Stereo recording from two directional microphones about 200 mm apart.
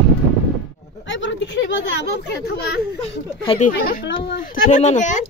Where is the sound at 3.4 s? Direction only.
40° left (ahead or behind).